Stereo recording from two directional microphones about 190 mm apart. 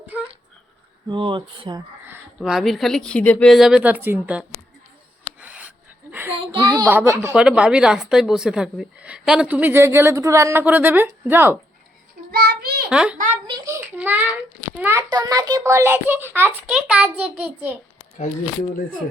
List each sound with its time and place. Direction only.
1.0 s speech: 25° right (ahead or behind)
2.4 s a woman's voice: centre (ahead or behind)
5.4 s a sound: 10° right (ahead or behind)
6.4 s a sound: 25° right (ahead or behind)
6.8 s a woman's voice: 10° right (ahead or behind)
12.3 s child singing: 60° right (ahead or behind)
12.9 s a woman's voice: 5° right (ahead or behind)